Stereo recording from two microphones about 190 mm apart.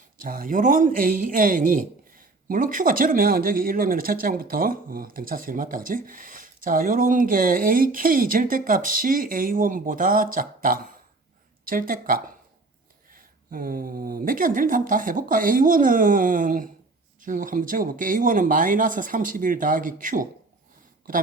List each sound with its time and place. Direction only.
0.2 s a man's voice: 45° right (ahead or behind)